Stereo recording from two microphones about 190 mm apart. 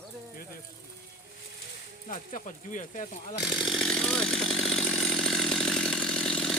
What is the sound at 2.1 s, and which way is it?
Speech, 40° left (ahead or behind).